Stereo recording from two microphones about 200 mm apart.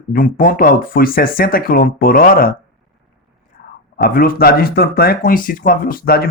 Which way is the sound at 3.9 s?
45° left (ahead or behind).